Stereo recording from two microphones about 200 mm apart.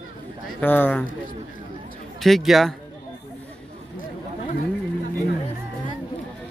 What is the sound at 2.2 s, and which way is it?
Speech, centre (ahead or behind).